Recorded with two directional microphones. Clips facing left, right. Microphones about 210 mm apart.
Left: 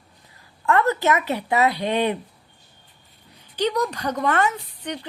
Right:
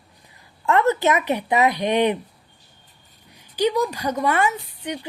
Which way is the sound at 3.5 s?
10° right (ahead or behind).